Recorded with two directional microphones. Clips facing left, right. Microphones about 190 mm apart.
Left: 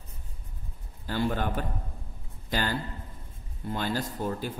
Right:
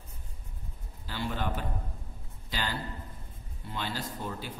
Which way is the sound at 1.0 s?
50° left (ahead or behind).